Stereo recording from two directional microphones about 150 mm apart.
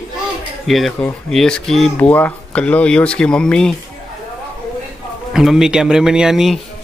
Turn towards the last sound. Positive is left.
turn(degrees=0)  # may be behind; listen again after turning